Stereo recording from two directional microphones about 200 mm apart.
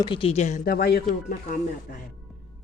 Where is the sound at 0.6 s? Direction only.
50° left (ahead or behind).